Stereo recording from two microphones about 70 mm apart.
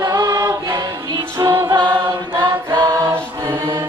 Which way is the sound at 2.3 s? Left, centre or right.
Right.